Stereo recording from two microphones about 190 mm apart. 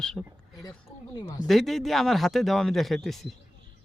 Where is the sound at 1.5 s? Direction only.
Centre (ahead or behind).